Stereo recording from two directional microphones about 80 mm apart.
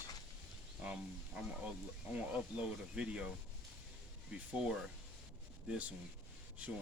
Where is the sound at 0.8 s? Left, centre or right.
Centre.